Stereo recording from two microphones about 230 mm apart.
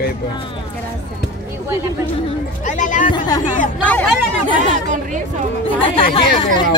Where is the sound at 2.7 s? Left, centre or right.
Left.